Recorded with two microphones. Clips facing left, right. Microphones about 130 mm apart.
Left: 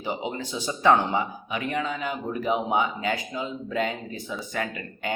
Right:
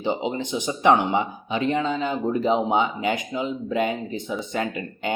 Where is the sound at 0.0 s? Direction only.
25° right (ahead or behind).